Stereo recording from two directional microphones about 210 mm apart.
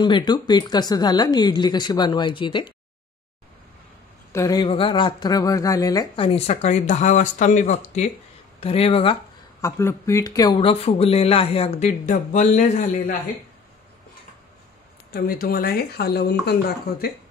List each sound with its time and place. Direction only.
0.0 s speech: 20° left (ahead or behind)
4.3 s speech: 15° left (ahead or behind)
9.6 s speech: 15° left (ahead or behind); by 13.1 s 40° left (ahead or behind)
15.0 s speech: 45° left (ahead or behind)